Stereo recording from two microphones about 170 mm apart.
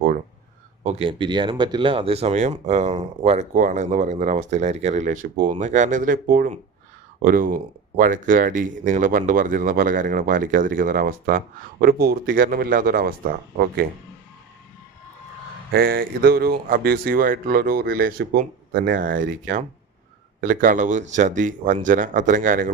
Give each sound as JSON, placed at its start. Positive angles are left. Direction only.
{"t": 0.9, "sound": "speech", "side_deg": -30}
{"t": 15.7, "sound": "speech", "side_deg": -65}